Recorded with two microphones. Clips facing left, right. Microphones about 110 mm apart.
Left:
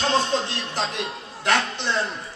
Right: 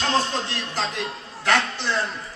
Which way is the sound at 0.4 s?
20° left (ahead or behind).